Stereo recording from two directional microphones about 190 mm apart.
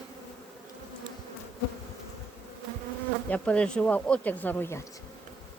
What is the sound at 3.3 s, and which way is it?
Speech, 5° left (ahead or behind).